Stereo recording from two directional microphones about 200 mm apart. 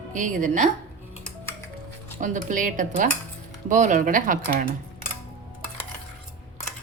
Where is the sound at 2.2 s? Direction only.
40° right (ahead or behind).